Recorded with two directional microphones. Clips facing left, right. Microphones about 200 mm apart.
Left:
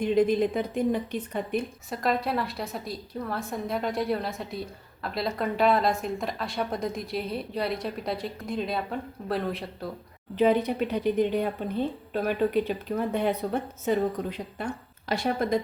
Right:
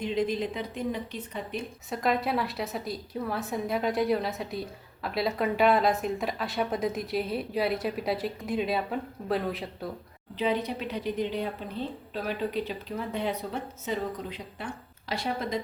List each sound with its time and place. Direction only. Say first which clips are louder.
0.0 s a woman's voice: left 6 dB; 50° left (ahead or behind)
1.9 s a woman's voice: even; centre (ahead or behind)
10.3 s a woman's voice: left 6 dB; 50° left (ahead or behind)